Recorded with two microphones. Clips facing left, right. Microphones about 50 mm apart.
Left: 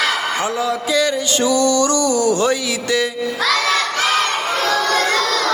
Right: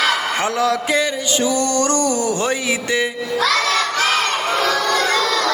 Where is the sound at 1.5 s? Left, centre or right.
Right.